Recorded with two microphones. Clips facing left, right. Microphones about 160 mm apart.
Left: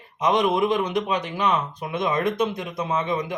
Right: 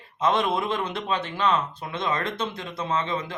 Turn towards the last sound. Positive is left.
turn(degrees=15)  # may be behind; listen again after turning